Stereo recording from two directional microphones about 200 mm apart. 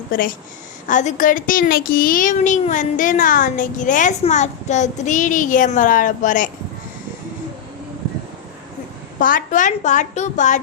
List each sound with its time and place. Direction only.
0.1 s a woman's voice: 45° left (ahead or behind)
9.1 s a child's voice: 40° left (ahead or behind)